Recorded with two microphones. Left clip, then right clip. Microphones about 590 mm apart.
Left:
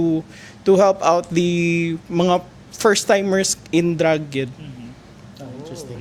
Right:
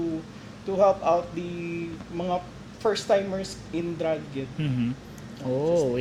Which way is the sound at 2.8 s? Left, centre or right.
Left.